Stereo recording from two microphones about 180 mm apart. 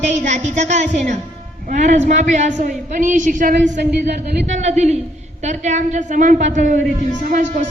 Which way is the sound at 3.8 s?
65° right (ahead or behind).